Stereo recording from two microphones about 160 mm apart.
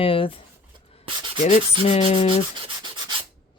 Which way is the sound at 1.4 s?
45° left (ahead or behind).